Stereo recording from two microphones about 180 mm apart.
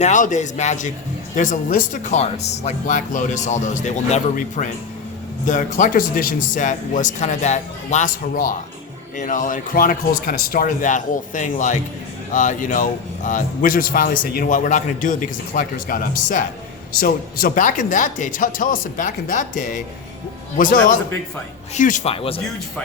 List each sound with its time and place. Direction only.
0.0 s a man's voice: 40° left (ahead or behind)
22.1 s a man's voice: 30° left (ahead or behind)